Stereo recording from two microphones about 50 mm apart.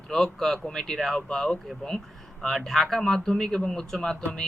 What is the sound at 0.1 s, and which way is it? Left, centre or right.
Speech, centre.